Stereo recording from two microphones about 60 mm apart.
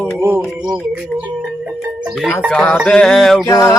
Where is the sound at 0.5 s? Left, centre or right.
Centre.